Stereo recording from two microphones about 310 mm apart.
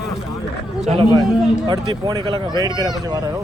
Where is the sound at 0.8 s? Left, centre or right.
Centre.